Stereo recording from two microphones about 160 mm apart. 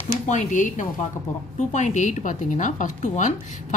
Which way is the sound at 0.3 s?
50° left (ahead or behind).